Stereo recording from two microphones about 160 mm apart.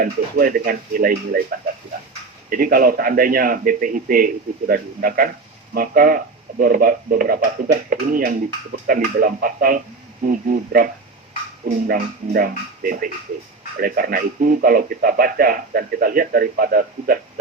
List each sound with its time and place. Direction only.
0.0 s speech: 60° right (ahead or behind)
2.5 s speech: 60° right (ahead or behind)